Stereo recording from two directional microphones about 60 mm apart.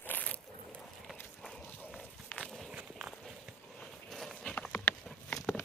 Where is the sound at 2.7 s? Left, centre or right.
Centre.